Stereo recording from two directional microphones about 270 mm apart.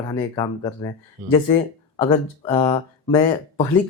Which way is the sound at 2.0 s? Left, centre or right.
Centre.